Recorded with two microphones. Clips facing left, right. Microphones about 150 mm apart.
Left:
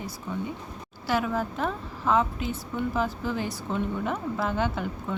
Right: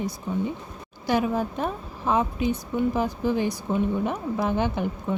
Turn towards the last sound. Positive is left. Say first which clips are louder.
# right 3 dB
turn(degrees=-20)  # may be behind; listen again after turning